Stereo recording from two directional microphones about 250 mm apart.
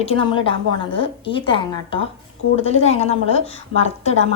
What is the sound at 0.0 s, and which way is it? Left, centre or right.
A woman's voice, left.